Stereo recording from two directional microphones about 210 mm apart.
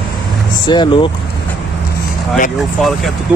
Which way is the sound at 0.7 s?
20° left (ahead or behind).